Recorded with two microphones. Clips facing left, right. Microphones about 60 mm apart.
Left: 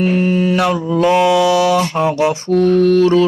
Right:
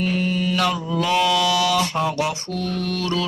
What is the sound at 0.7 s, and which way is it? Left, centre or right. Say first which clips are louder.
Speech: left 8 dB; left.